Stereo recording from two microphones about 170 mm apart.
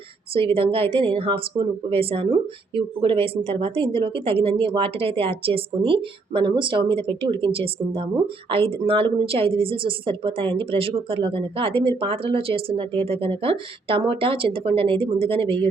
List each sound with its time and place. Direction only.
0.3 s a woman's voice: 30° right (ahead or behind)